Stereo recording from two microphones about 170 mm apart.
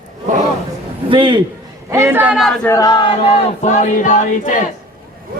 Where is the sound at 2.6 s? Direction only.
15° left (ahead or behind); by 4.5 s 50° left (ahead or behind).